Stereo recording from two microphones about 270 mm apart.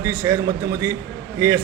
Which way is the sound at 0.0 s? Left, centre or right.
Centre.